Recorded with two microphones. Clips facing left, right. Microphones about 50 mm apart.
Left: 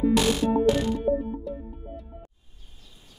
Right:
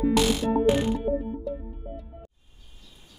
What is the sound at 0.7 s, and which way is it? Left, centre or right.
Music, centre.